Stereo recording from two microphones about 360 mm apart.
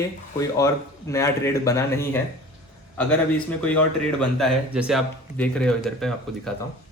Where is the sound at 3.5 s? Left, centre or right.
Centre.